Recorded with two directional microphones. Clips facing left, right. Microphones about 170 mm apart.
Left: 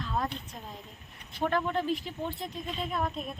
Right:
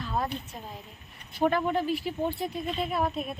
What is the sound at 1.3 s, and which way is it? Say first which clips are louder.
Speech: right 4 dB; 5° right (ahead or behind).